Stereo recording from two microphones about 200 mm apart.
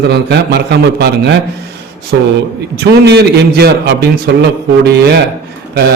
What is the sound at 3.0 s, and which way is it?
A man's voice, 55° right (ahead or behind).